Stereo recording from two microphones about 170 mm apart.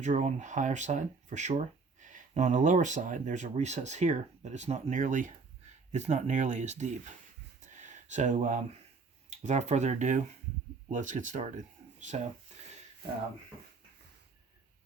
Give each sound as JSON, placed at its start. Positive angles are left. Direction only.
{"t": 0.0, "sound": "speech", "side_deg": -45}
{"t": 7.6, "sound": "a sound", "side_deg": -45}
{"t": 9.3, "sound": "speech", "side_deg": -40}